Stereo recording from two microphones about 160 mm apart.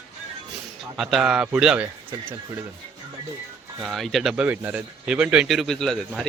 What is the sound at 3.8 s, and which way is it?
Speech, centre (ahead or behind).